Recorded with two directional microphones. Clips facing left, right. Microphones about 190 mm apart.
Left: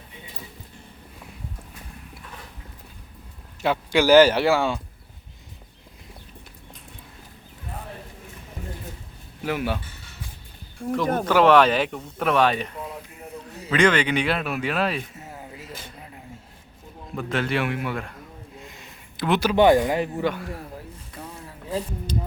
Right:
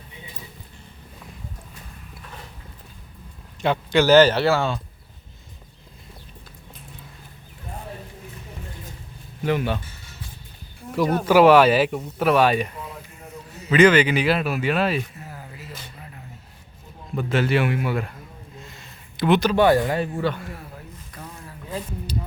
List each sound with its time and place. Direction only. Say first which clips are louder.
3.6 s speech: right 1 dB; 10° left (ahead or behind)
9.4 s speech: right 3 dB; 5° left (ahead or behind)
11.3 s a man's voice: right 3 dB; 10° right (ahead or behind)
15.2 s a sound: even; 25° left (ahead or behind)
17.2 s a man's voice: right 4 dB; 5° right (ahead or behind)
18.5 s a sound: even; 15° left (ahead or behind)
19.1 s speech: right 3 dB; centre (ahead or behind)
19.5 s speech: left 1 dB; 15° left (ahead or behind)
21.4 s a sound: left 3 dB; 30° left (ahead or behind)